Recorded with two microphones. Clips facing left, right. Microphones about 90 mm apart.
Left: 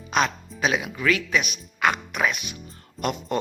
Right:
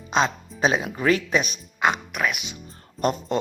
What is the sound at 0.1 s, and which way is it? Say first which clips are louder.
Speech: right 1 dB; 30° right (ahead or behind).